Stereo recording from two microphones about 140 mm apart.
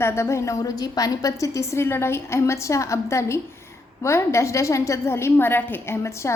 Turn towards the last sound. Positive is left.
turn(degrees=20)  # may be behind; listen again after turning